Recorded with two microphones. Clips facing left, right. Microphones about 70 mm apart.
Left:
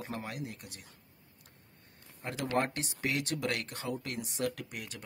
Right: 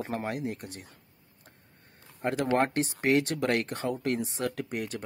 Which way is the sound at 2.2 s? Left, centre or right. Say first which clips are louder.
Right 6 dB; right.